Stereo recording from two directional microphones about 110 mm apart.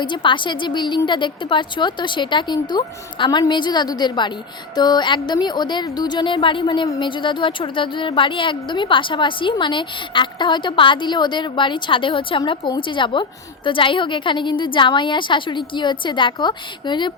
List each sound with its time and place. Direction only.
0.0 s a woman's voice: 45° left (ahead or behind)